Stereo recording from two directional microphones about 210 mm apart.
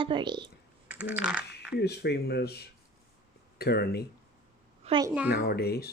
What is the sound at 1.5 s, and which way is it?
Speech, 50° left (ahead or behind).